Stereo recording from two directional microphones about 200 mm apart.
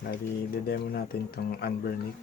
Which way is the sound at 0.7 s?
50° left (ahead or behind).